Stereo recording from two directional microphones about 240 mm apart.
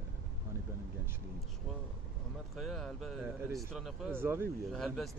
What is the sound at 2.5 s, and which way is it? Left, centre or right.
Speech, centre.